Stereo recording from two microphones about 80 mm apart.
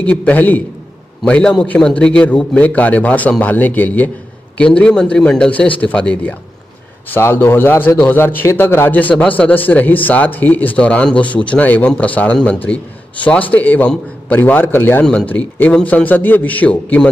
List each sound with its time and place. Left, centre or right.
0.0 s a man's voice: centre
7.1 s speech: left